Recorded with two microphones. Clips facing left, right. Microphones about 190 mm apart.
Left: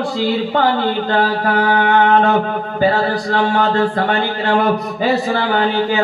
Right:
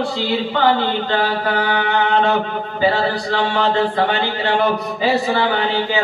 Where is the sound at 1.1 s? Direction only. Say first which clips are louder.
Left 3 dB; 45° left (ahead or behind).